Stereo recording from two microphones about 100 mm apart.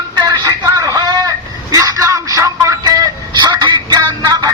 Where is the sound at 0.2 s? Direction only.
45° right (ahead or behind).